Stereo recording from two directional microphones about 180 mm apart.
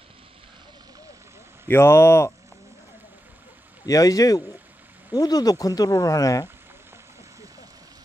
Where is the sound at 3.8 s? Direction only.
20° left (ahead or behind).